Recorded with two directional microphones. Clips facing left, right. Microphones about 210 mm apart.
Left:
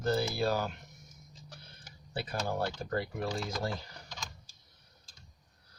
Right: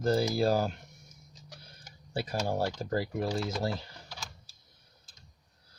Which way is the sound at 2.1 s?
30° right (ahead or behind).